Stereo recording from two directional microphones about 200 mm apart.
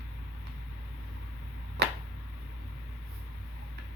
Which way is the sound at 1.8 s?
60° right (ahead or behind).